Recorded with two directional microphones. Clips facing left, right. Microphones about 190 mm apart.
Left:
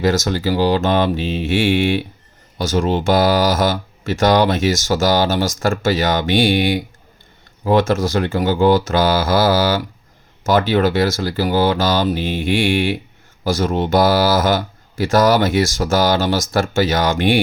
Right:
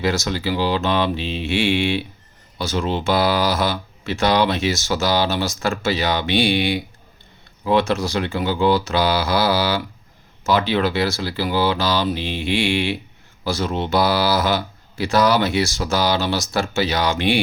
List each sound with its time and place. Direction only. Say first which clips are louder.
0.0 s speech: left 4 dB; 45° left (ahead or behind)